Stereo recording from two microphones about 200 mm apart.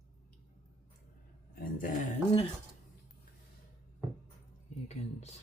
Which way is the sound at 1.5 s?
45° left (ahead or behind).